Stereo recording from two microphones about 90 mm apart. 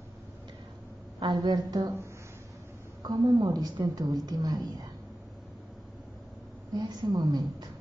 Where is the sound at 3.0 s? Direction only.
45° right (ahead or behind).